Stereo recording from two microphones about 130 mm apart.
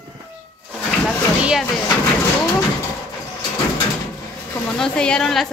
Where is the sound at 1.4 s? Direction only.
5° right (ahead or behind).